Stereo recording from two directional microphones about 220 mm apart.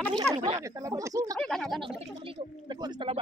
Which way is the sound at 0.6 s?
15° right (ahead or behind).